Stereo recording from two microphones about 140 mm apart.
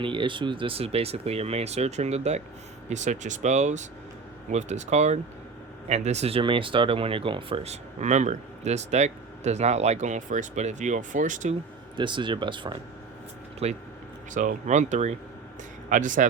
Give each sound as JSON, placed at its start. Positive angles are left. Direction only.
{"t": 0.0, "sound": "speech", "side_deg": -35}
{"t": 11.9, "sound": "speech", "side_deg": -35}
{"t": 13.6, "sound": "speech", "side_deg": -45}
{"t": 14.3, "sound": "speech", "side_deg": -60}